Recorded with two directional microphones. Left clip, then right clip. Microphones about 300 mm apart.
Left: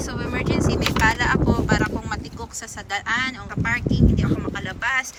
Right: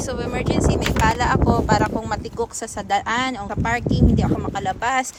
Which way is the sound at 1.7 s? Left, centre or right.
Centre.